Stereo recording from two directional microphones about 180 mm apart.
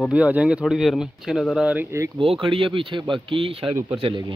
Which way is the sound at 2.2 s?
30° right (ahead or behind).